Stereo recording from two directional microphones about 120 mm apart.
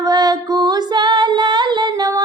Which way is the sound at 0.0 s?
35° right (ahead or behind).